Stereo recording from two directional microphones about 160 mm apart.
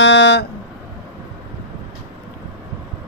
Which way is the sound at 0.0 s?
90° left.